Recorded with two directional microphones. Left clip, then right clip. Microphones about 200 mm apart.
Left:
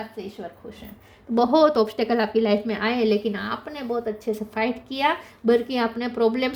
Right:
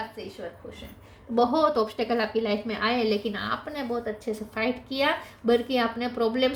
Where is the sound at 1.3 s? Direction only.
50° left (ahead or behind).